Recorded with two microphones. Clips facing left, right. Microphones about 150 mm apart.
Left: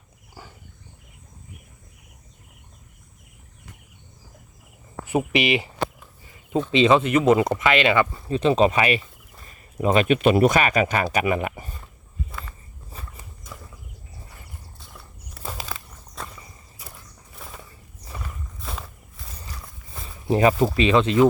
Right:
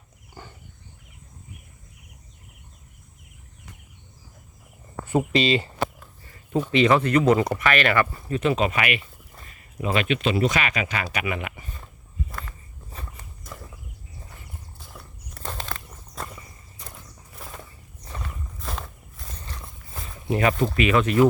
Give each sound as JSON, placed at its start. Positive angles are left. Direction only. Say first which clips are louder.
{"t": 0.4, "sound": "wild animals", "louder": "right 1 dB", "side_deg": 5}
{"t": 5.0, "sound": "speech", "louder": "even", "side_deg": 15}
{"t": 6.2, "sound": "a sound", "louder": "left 1 dB", "side_deg": 15}
{"t": 6.7, "sound": "speech", "louder": "left 2 dB", "side_deg": 20}
{"t": 10.2, "sound": "speech", "louder": "left 6 dB", "side_deg": 50}
{"t": 12.3, "sound": "walk", "louder": "right 1 dB", "side_deg": 5}
{"t": 14.9, "sound": "walk", "louder": "right 2 dB", "side_deg": 5}
{"t": 16.2, "sound": "a sound", "louder": "right 1 dB", "side_deg": 0}
{"t": 16.8, "sound": "mechanisms", "louder": "right 1 dB", "side_deg": 10}
{"t": 17.3, "sound": "a sound", "louder": "right 1 dB", "side_deg": 0}
{"t": 18.0, "sound": "horse", "louder": "right 1 dB", "side_deg": 5}
{"t": 19.9, "sound": "a sound", "louder": "right 1 dB", "side_deg": 0}
{"t": 20.2, "sound": "speech", "louder": "left 4 dB", "side_deg": 30}